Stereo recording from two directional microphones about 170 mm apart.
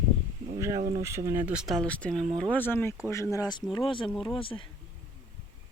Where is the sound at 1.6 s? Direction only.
5° left (ahead or behind); by 4.7 s 30° left (ahead or behind).